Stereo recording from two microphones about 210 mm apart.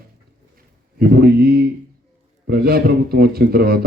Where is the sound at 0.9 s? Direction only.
45° right (ahead or behind).